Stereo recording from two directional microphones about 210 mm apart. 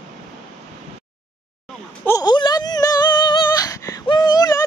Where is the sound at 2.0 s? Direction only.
15° left (ahead or behind).